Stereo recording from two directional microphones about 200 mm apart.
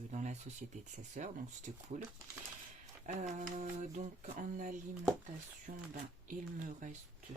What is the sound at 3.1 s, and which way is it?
Speech, 40° right (ahead or behind).